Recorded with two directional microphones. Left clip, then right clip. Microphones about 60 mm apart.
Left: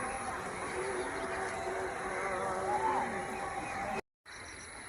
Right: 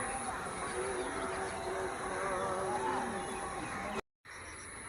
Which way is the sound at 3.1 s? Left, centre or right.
Left.